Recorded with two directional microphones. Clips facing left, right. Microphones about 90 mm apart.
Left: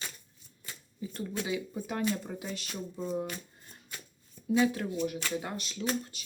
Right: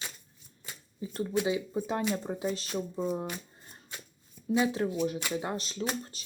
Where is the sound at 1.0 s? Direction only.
25° right (ahead or behind).